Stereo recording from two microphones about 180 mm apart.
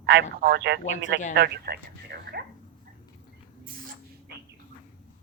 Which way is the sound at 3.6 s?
50° right (ahead or behind).